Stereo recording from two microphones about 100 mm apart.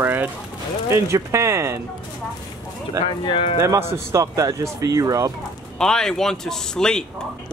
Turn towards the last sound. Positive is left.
turn(degrees=5)  # may be behind; listen again after turning